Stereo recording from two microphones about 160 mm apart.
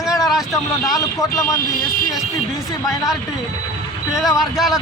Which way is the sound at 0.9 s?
20° left (ahead or behind).